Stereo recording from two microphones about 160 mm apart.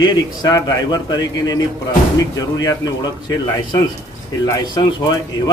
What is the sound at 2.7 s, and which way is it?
A man's voice, 25° left (ahead or behind).